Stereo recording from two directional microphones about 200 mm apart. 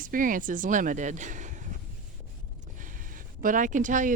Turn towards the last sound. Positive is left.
turn(degrees=-40)  # may be behind; listen again after turning